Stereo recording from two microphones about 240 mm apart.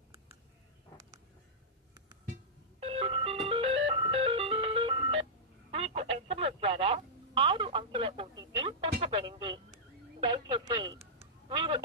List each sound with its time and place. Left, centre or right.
2.8 s music: right
5.7 s telephone: right
9.2 s a sound: right